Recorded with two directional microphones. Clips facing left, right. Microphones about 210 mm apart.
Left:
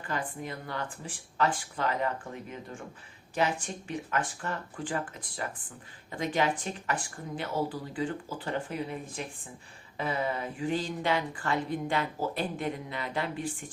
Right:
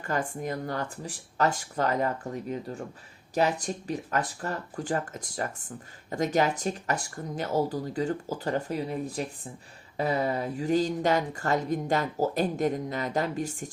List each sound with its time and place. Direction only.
0.0 s speech: 45° right (ahead or behind)